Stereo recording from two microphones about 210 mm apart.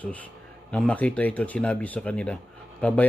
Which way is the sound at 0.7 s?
5° left (ahead or behind).